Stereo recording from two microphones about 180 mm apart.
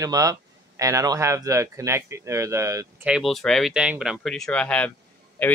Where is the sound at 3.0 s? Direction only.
Centre (ahead or behind).